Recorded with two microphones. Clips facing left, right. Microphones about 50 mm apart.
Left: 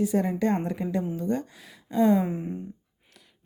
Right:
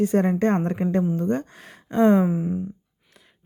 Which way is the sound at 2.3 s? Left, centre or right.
Centre.